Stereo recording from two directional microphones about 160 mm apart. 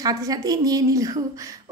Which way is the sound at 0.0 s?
20° right (ahead or behind).